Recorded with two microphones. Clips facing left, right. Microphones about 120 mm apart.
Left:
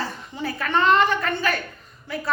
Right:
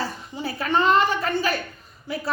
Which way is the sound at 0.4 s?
35° right (ahead or behind).